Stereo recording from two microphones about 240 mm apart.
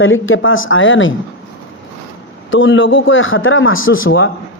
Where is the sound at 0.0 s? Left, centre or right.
Left.